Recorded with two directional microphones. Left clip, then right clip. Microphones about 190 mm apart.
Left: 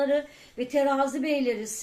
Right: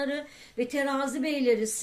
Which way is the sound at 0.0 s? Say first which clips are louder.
Left 7 dB; 45° right (ahead or behind).